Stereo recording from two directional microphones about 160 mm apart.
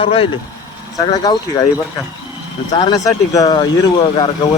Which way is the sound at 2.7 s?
25° left (ahead or behind).